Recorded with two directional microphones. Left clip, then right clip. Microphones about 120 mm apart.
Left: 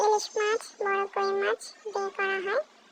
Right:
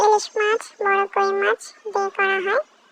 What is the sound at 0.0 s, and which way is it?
Speech, 30° right (ahead or behind).